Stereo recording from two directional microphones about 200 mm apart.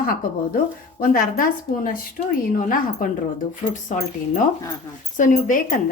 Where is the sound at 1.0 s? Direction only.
45° left (ahead or behind).